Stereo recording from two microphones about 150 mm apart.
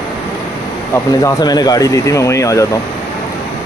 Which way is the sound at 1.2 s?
25° left (ahead or behind).